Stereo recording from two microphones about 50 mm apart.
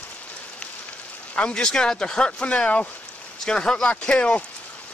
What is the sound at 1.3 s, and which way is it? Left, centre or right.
Speech, centre.